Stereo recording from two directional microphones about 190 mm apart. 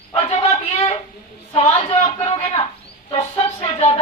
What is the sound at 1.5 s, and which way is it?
Speech, 30° left (ahead or behind).